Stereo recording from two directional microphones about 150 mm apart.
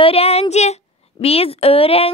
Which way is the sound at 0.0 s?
40° left (ahead or behind).